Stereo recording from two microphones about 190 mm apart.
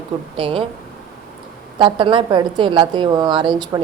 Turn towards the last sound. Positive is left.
turn(degrees=-25)  # may be behind; listen again after turning